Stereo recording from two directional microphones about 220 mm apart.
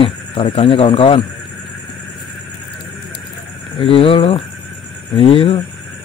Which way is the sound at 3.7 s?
25° left (ahead or behind).